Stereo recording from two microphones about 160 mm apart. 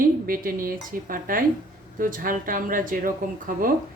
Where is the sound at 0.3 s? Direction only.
60° right (ahead or behind).